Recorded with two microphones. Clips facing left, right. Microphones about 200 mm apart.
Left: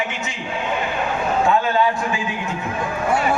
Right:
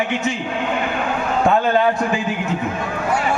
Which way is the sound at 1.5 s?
55° right (ahead or behind).